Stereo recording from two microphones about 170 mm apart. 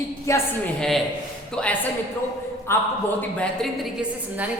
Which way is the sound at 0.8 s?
Centre (ahead or behind).